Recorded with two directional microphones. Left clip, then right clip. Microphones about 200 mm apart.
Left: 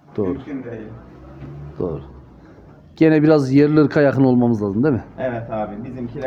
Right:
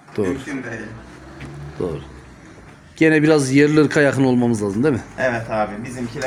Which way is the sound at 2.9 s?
20° left (ahead or behind).